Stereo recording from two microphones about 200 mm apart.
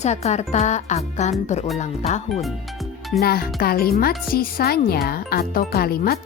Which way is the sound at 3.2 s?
50° left (ahead or behind).